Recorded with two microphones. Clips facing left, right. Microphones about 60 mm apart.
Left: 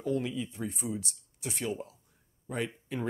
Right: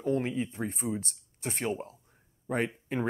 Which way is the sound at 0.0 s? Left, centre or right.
Right.